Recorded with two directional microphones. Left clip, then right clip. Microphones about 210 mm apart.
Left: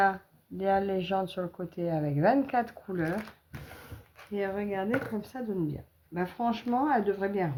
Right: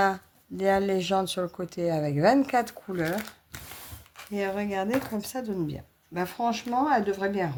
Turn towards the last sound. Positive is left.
turn(degrees=-30)  # may be behind; listen again after turning